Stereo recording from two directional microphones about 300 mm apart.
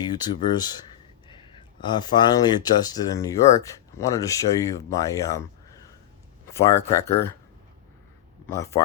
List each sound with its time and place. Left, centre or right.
0.0 s speech: centre
1.8 s speech: centre
8.4 s speech: centre